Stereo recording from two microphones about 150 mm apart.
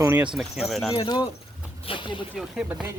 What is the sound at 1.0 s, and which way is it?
Speech, 35° left (ahead or behind).